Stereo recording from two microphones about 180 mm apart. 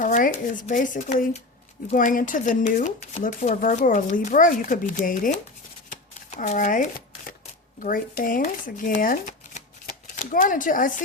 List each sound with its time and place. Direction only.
0.0 s speech: 50° left (ahead or behind)
5.9 s shuffling cards: 40° left (ahead or behind)
7.8 s speech: 50° left (ahead or behind)